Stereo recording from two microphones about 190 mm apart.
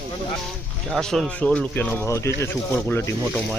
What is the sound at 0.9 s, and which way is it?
Speech, centre (ahead or behind).